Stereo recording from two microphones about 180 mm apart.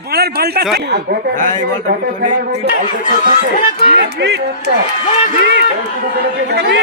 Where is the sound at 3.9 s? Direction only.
75° right (ahead or behind).